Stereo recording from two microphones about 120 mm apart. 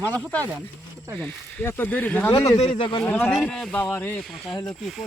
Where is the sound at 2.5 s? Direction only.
60° left (ahead or behind).